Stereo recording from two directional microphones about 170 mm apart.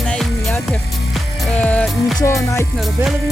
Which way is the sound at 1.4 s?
10° left (ahead or behind).